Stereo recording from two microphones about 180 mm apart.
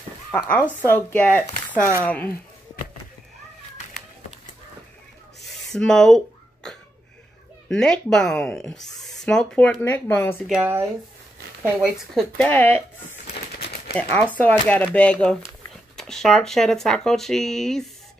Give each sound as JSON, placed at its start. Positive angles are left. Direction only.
{"t": 0.3, "sound": "speech", "side_deg": 5}
{"t": 5.7, "sound": "a sound", "side_deg": 5}
{"t": 7.7, "sound": "speech", "side_deg": 5}
{"t": 10.4, "sound": "speech", "side_deg": -5}
{"t": 12.4, "sound": "speech", "side_deg": 10}
{"t": 13.3, "sound": "a sound", "side_deg": 60}
{"t": 14.3, "sound": "speech", "side_deg": 10}